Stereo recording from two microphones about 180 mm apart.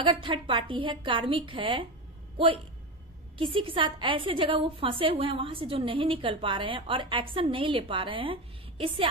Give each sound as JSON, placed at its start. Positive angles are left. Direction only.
{"t": 0.0, "sound": "a woman's voice", "side_deg": -30}